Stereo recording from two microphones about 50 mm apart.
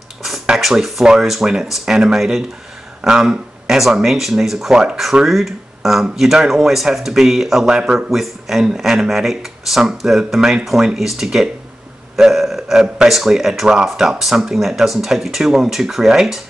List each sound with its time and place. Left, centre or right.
0.6 s speech: centre
12.2 s burping: centre
13.1 s speech: centre